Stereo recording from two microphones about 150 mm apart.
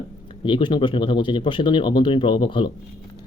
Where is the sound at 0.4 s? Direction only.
35° left (ahead or behind).